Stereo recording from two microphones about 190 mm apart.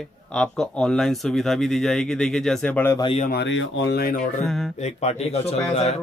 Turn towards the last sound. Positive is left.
turn(degrees=35)  # may be behind; listen again after turning